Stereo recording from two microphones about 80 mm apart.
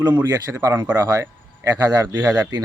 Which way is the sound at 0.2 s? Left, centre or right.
Right.